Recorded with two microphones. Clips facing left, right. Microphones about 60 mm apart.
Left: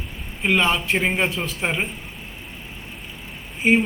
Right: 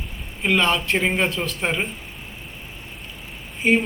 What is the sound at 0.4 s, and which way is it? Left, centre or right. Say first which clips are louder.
A man's voice: even; centre.